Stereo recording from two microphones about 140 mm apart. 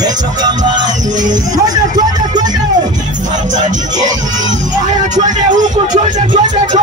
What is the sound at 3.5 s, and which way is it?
Music, 60° right (ahead or behind).